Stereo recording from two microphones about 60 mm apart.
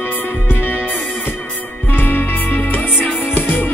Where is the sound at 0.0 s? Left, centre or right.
Left.